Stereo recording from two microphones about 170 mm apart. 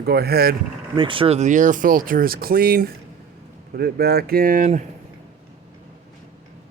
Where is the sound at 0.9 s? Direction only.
30° right (ahead or behind).